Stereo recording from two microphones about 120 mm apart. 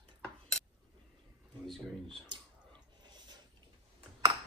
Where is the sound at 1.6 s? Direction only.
Centre (ahead or behind).